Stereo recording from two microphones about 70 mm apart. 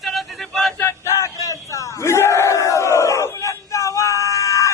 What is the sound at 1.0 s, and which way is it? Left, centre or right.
Battle cry, left.